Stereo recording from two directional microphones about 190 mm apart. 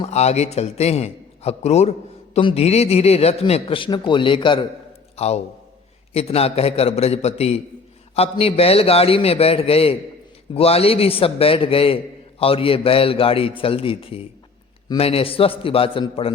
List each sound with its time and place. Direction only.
0.0 s a man's voice: 35° left (ahead or behind)